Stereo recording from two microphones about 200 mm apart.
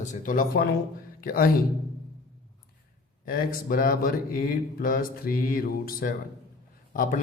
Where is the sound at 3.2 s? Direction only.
45° left (ahead or behind).